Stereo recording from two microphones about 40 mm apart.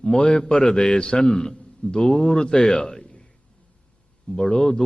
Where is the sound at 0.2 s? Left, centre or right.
Left.